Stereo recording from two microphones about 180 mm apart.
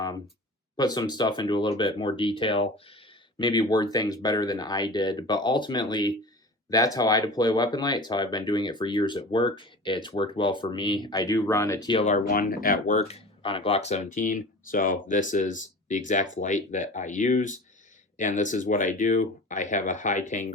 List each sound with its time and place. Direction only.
0.8 s speech: 20° left (ahead or behind)
12.0 s speech: 50° left (ahead or behind)
13.1 s speech: 30° left (ahead or behind)